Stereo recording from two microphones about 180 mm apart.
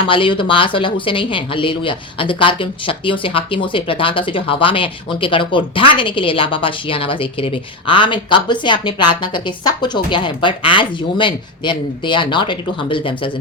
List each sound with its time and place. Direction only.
0.1 s speech: 30° left (ahead or behind)